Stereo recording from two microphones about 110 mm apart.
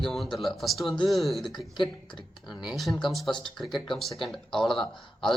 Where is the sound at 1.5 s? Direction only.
45° left (ahead or behind).